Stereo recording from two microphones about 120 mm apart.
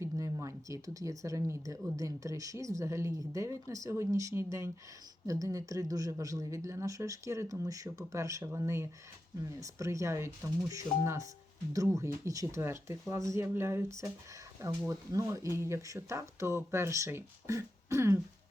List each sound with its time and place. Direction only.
0.0 s speech: 25° right (ahead or behind)